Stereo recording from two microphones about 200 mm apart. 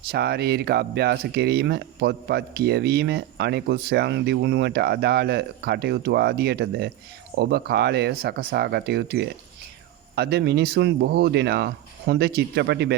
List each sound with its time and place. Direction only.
0.1 s speech: 55° right (ahead or behind)